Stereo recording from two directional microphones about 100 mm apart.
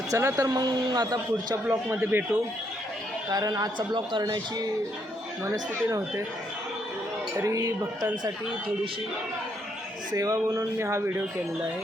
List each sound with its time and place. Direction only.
0.1 s speech: 30° right (ahead or behind)
1.7 s a man's voice: 25° right (ahead or behind)
3.2 s speech: 40° right (ahead or behind)
4.2 s speech: 40° right (ahead or behind)
5.5 s speech: 30° right (ahead or behind)
7.4 s speech: 35° right (ahead or behind)
10.1 s speech: 35° right (ahead or behind)